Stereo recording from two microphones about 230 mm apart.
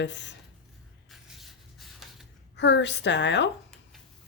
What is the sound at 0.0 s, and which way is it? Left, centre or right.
Speech, left.